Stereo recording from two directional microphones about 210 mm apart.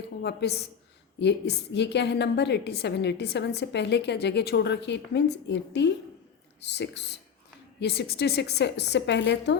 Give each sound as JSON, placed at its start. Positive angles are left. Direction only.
{"t": 0.2, "sound": "a woman's voice", "side_deg": 50}